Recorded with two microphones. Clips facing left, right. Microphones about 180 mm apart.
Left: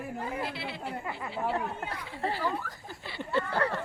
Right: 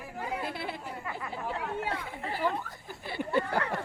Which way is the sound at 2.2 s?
35° left (ahead or behind).